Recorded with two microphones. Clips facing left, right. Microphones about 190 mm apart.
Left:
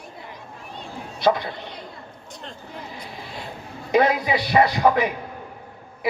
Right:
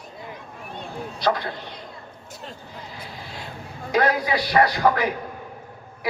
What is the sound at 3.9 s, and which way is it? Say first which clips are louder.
A man's voice: left 2 dB; 20° left (ahead or behind).